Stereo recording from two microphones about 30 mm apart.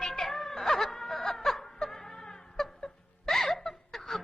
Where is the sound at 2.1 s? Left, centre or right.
Left.